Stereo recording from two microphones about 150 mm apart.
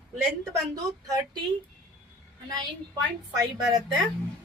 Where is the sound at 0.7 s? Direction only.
25° right (ahead or behind).